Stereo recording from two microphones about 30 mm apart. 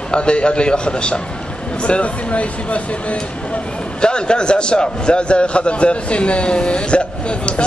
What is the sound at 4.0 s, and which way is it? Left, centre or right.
A man's voice, left.